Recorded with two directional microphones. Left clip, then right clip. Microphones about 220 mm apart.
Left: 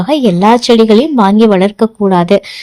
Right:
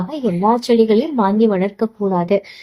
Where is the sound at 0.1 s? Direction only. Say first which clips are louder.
Left 9 dB; 35° left (ahead or behind).